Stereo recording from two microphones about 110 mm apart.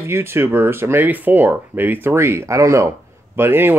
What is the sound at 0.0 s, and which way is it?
Speech, 20° right (ahead or behind).